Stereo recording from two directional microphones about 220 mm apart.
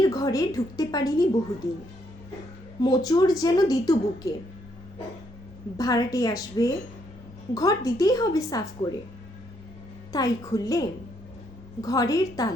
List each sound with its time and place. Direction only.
0.0 s a woman's voice: 15° left (ahead or behind)
2.8 s a woman's voice: 15° left (ahead or behind)
5.7 s a woman's voice: 15° left (ahead or behind)
10.1 s a woman's voice: 15° left (ahead or behind)